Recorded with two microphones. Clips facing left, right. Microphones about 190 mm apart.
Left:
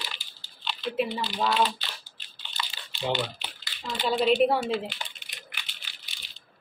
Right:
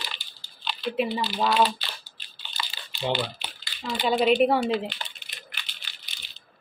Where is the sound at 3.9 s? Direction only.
5° right (ahead or behind).